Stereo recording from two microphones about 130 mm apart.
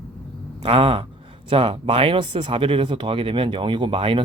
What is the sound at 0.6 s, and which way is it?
A man's voice, 45° right (ahead or behind).